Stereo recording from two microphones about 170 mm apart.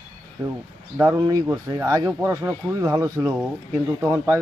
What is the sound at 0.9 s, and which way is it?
Speech, 20° right (ahead or behind).